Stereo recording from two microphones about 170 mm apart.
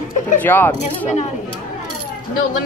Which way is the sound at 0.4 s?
10° left (ahead or behind).